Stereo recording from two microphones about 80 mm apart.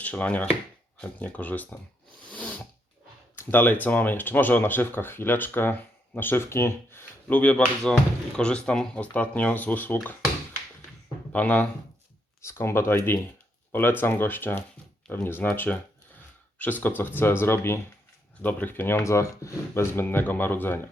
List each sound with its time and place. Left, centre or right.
0.0 s speech: centre
2.3 s a sound: centre
3.3 s speech: left
7.3 s speech: centre
11.3 s speech: centre
12.5 s speech: left
16.8 s speech: left
19.0 s speech: left